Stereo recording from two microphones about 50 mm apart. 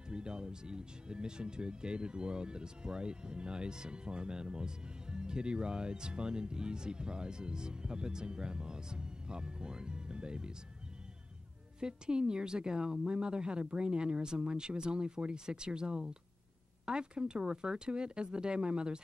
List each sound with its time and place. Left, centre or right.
0.1 s speech: centre
11.8 s speech: centre